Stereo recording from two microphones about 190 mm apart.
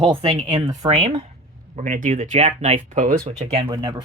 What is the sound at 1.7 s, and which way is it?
Speech, 40° right (ahead or behind).